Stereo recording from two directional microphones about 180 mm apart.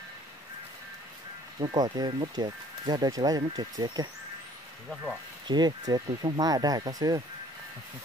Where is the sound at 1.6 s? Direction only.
25° right (ahead or behind).